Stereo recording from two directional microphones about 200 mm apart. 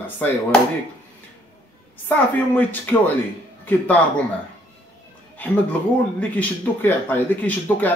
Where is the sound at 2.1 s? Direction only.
10° left (ahead or behind).